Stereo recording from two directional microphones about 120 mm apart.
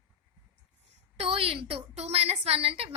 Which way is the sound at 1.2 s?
55° right (ahead or behind).